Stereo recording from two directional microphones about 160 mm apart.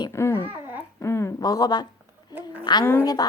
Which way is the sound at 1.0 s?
15° left (ahead or behind).